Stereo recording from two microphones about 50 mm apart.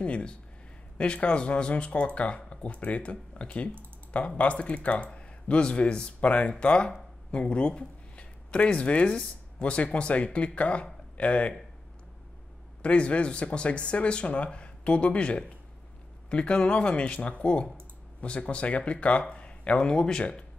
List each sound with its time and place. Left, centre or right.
0.0 s speech: left
12.8 s speech: left